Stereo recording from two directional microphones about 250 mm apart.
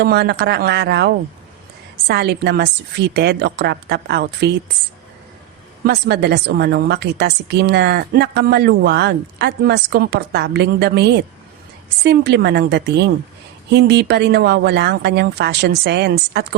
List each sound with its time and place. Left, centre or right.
0.0 s a woman's voice: right
5.8 s a woman's voice: right